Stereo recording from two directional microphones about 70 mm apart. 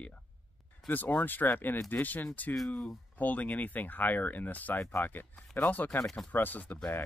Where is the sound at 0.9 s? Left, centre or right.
Left.